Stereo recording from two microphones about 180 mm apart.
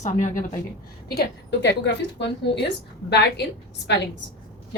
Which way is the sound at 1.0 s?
60° left (ahead or behind).